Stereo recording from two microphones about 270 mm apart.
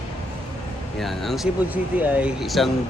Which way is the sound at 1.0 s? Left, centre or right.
Centre.